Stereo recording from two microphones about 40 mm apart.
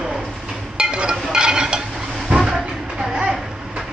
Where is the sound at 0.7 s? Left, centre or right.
Right.